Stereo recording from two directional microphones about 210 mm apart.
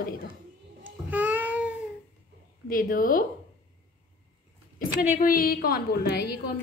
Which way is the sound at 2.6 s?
40° left (ahead or behind).